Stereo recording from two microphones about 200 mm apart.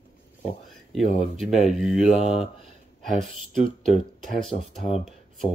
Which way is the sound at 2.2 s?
30° left (ahead or behind).